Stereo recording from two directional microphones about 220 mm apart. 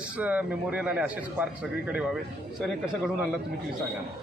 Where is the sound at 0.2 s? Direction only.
5° right (ahead or behind).